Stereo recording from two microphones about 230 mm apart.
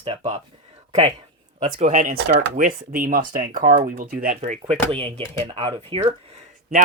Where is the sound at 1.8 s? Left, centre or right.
Right.